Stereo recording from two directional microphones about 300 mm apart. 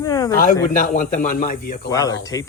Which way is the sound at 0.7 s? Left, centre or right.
Left.